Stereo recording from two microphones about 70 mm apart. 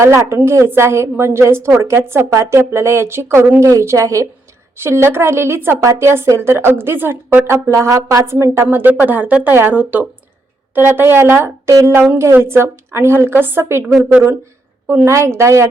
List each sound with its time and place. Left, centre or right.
0.0 s a woman's voice: right
3.7 s a woman's voice: right
4.8 s a woman's voice: right
7.7 s a woman's voice: right
15.0 s a woman's voice: right